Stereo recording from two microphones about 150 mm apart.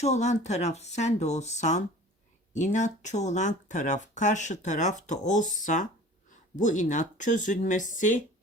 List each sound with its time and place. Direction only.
0.0 s speech: 50° left (ahead or behind)